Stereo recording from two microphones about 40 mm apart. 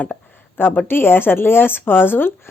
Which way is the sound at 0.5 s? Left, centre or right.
Left.